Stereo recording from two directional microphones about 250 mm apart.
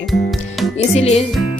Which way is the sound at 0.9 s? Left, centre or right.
Left.